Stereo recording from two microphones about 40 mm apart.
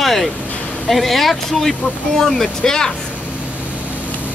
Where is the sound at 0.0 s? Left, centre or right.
Centre.